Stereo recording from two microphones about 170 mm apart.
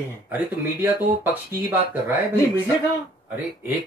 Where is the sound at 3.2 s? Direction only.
10° right (ahead or behind).